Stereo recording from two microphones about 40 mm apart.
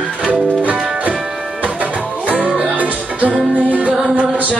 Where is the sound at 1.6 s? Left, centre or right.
Right.